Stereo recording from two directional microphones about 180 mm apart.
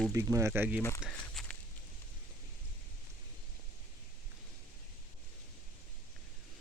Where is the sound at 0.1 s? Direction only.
15° right (ahead or behind).